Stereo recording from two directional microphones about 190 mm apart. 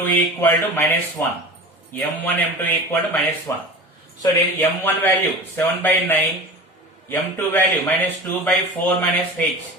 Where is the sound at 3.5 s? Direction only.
15° left (ahead or behind).